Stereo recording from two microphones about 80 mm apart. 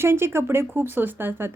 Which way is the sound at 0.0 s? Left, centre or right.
Right.